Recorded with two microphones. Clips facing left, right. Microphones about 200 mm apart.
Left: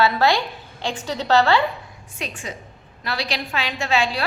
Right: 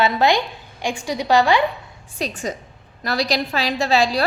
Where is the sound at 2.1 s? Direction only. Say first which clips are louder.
Right 6 dB; 40° right (ahead or behind).